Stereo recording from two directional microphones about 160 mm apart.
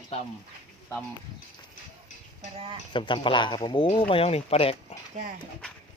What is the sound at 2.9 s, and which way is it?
Speech, 30° left (ahead or behind).